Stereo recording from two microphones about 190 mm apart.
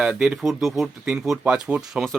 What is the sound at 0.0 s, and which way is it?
Speech, 5° right (ahead or behind).